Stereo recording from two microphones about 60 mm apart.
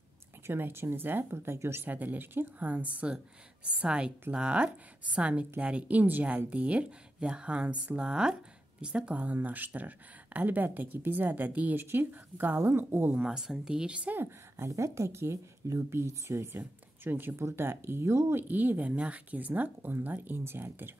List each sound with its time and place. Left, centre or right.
0.5 s speech: right
1.9 s speech: right
12.6 s speech: right
13.2 s speech: centre
14.6 s speech: right
17.4 s speech: right
18.3 s speech: right